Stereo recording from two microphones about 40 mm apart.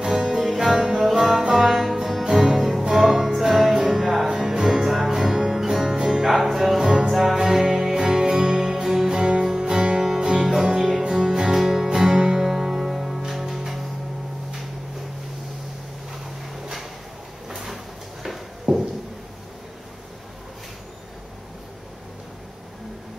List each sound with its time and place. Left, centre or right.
0.0 s music: centre
0.4 s music: centre; by 10.8 s right
10.8 s music: centre
17.5 s sliding door: centre
18.2 s a sound: centre